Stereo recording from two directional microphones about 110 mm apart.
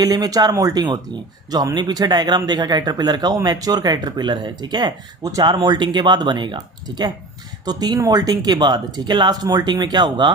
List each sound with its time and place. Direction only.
0.0 s speech: 35° right (ahead or behind)